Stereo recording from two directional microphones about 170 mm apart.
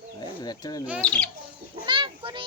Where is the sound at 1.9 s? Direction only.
30° right (ahead or behind).